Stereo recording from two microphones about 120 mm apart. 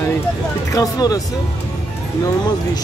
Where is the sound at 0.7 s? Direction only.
30° left (ahead or behind).